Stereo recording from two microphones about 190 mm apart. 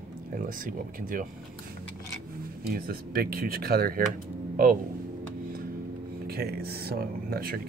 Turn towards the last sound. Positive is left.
turn(degrees=-50)  # may be behind; listen again after turning